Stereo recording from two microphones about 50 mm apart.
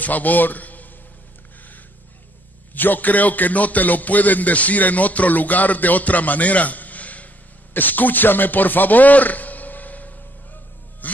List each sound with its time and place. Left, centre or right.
0.0 s a man's voice: left
2.7 s a man's voice: left
7.7 s a sound: left